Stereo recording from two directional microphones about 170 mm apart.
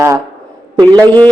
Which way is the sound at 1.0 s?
10° left (ahead or behind).